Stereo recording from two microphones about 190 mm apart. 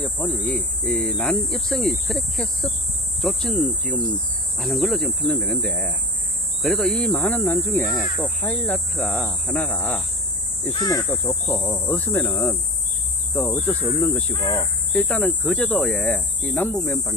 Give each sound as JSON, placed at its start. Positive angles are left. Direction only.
{"t": 0.2, "sound": "speech", "side_deg": 5}
{"t": 10.8, "sound": "speech", "side_deg": 20}
{"t": 14.3, "sound": "speech", "side_deg": 20}
{"t": 14.9, "sound": "speech", "side_deg": 5}